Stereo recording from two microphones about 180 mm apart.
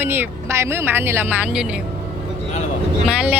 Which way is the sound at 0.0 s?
10° right (ahead or behind).